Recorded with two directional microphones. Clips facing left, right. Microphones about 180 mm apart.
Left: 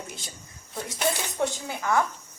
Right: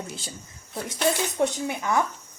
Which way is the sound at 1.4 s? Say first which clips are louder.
Right 3 dB; 20° right (ahead or behind).